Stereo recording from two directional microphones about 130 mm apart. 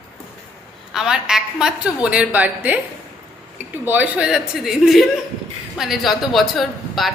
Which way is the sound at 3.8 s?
10° right (ahead or behind).